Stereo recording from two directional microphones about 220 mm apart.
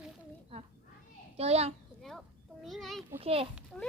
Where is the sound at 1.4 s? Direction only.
30° right (ahead or behind).